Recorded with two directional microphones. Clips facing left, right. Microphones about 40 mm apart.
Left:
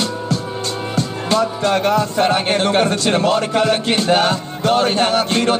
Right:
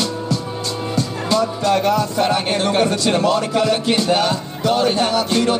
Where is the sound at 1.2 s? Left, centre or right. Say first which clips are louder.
Left 1 dB; left.